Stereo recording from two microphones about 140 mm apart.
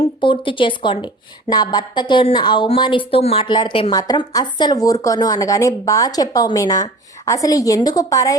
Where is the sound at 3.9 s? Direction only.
25° left (ahead or behind).